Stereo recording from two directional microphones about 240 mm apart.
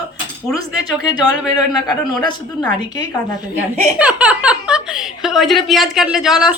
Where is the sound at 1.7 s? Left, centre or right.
Centre.